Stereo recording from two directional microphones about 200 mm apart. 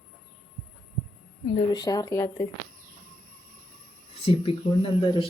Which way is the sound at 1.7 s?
20° left (ahead or behind).